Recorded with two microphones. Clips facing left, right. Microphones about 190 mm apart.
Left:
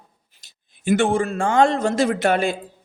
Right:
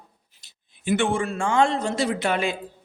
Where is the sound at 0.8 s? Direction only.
40° left (ahead or behind).